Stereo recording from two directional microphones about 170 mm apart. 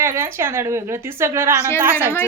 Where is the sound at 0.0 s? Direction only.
15° right (ahead or behind).